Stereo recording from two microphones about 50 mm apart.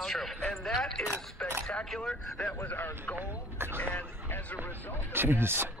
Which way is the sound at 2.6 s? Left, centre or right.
Left.